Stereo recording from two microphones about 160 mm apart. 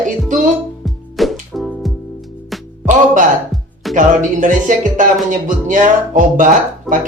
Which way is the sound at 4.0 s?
55° right (ahead or behind).